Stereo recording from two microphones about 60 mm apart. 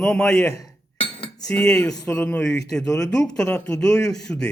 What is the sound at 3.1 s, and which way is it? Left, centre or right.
Speech, centre.